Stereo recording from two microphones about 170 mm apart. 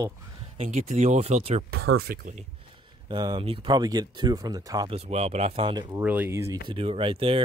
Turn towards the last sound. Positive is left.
turn(degrees=-30)  # may be behind; listen again after turning